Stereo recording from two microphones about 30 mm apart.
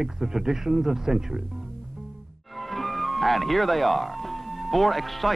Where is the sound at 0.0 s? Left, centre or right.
Centre.